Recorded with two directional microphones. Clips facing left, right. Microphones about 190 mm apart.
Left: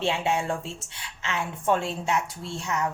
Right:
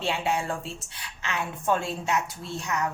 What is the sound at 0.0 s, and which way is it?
A woman's voice, 25° left (ahead or behind).